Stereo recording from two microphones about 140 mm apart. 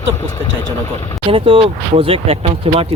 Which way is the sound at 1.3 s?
40° right (ahead or behind).